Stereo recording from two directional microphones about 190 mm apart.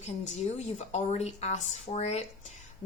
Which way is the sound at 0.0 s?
35° left (ahead or behind).